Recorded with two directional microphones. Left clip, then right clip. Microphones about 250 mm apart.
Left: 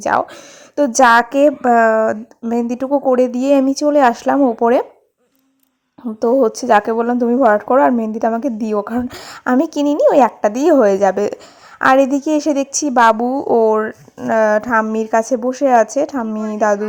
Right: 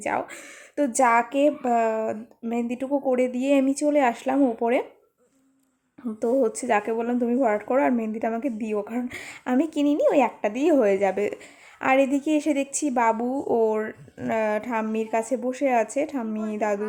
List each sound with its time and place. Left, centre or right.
0.1 s a woman's voice: centre
6.1 s a woman's voice: centre